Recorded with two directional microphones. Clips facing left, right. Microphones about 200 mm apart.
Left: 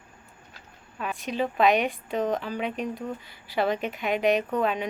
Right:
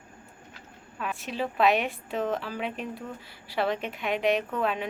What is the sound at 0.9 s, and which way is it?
Speech, centre (ahead or behind).